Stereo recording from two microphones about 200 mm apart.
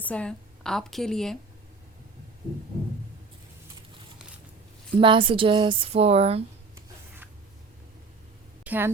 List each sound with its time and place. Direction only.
0.0 s a woman's voice: 5° left (ahead or behind)
4.9 s speech: 25° right (ahead or behind)
8.6 s a sound: 10° right (ahead or behind)